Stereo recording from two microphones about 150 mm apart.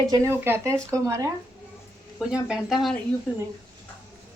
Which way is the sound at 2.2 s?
5° right (ahead or behind).